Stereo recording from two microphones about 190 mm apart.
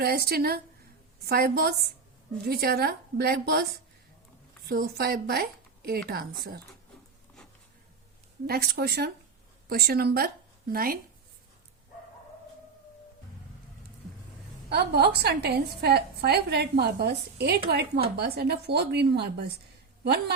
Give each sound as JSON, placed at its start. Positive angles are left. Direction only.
{"t": 0.0, "sound": "a woman's voice", "side_deg": -55}
{"t": 4.7, "sound": "a woman's voice", "side_deg": -55}
{"t": 8.4, "sound": "a woman's voice", "side_deg": -55}
{"t": 14.7, "sound": "a woman's voice", "side_deg": -60}